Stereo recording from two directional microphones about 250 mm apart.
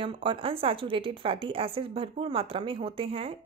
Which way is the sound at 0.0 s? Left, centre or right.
Right.